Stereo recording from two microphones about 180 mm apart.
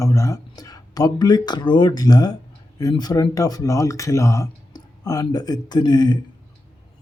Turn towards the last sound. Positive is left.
turn(degrees=25)  # may be behind; listen again after turning